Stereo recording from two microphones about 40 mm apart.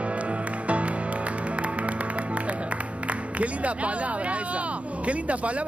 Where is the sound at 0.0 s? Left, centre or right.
Right.